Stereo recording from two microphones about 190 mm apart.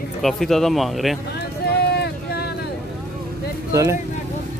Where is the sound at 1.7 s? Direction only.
60° left (ahead or behind).